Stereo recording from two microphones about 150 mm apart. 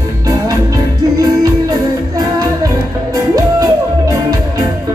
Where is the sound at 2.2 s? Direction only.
25° right (ahead or behind).